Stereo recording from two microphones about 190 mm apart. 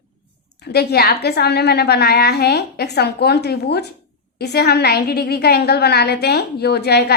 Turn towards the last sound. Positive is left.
turn(degrees=60)  # may be behind; listen again after turning